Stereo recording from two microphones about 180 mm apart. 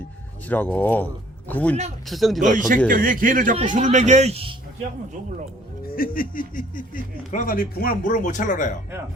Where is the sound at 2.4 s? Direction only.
45° right (ahead or behind).